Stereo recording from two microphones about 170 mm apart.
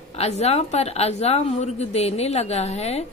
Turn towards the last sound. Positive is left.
turn(degrees=40)  # may be behind; listen again after turning